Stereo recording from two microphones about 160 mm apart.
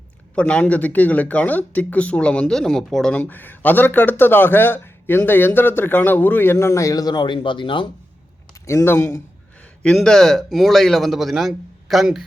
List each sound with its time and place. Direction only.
0.3 s speech: 5° left (ahead or behind); by 7.9 s 30° left (ahead or behind)
8.6 s speech: 15° left (ahead or behind)
9.8 s a man's voice: 5° left (ahead or behind)